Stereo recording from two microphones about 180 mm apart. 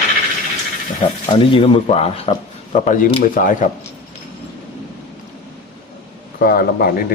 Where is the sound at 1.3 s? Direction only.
30° left (ahead or behind).